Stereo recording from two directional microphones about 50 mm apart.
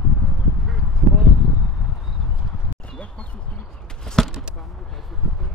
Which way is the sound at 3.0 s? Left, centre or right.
Left.